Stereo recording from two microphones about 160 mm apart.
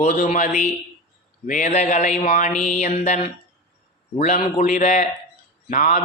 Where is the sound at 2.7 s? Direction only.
45° left (ahead or behind).